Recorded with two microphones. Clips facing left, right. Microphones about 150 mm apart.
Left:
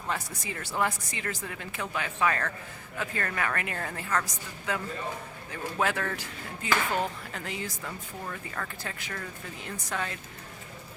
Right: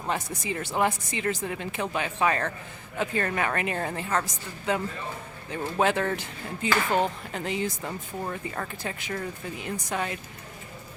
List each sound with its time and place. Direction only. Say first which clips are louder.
0.1 s speech: right 4 dB; 20° right (ahead or behind)